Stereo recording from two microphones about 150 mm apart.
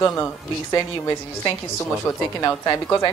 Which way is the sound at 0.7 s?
35° left (ahead or behind).